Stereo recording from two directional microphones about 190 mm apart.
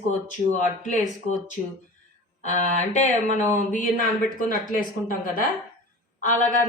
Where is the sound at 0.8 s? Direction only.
40° left (ahead or behind).